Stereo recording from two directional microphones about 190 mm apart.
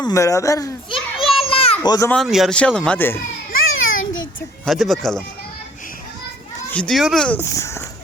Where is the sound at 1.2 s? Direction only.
Centre (ahead or behind).